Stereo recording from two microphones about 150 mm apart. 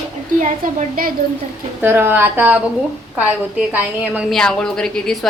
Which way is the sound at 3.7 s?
10° right (ahead or behind).